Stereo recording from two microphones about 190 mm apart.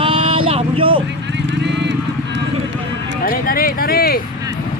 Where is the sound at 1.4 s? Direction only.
65° right (ahead or behind).